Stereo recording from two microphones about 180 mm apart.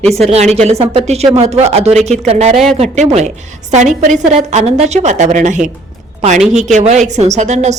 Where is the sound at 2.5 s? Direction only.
Centre (ahead or behind).